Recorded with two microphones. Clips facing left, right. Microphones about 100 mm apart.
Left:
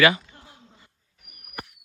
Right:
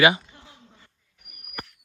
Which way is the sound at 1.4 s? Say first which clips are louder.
Even; 15° left (ahead or behind).